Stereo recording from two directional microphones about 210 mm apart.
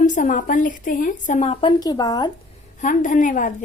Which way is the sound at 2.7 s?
35° left (ahead or behind).